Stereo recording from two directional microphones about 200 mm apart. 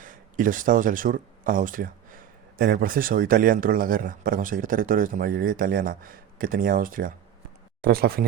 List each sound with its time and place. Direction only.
0.0 s speech: 40° right (ahead or behind)